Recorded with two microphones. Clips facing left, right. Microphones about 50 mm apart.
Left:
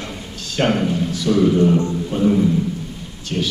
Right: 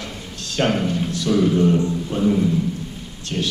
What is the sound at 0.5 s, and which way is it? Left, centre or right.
A man's voice, centre.